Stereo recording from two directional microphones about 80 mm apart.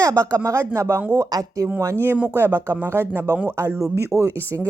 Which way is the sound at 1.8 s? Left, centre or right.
Right.